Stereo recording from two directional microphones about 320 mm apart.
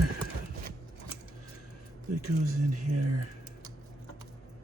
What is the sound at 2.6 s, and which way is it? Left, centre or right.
Speech, right.